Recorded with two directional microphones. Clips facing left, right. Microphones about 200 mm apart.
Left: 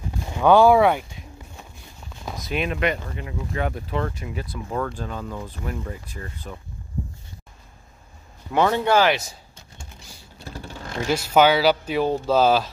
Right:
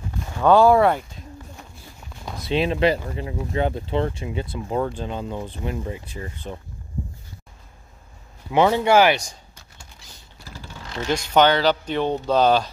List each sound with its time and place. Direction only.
0.5 s speech: centre (ahead or behind)
2.4 s speech: 30° right (ahead or behind)
8.5 s speech: 10° right (ahead or behind)
9.1 s speech: 5° left (ahead or behind)
11.1 s speech: 5° left (ahead or behind)